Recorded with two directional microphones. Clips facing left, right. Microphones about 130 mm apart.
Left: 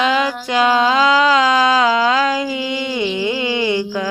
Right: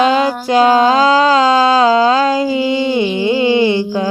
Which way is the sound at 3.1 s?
30° right (ahead or behind).